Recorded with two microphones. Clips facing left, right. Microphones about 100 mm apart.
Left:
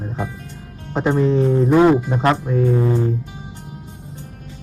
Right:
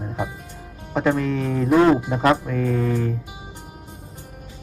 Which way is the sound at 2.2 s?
30° left (ahead or behind).